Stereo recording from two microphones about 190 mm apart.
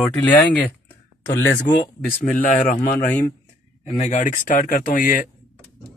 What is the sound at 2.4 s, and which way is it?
Speech, 45° left (ahead or behind).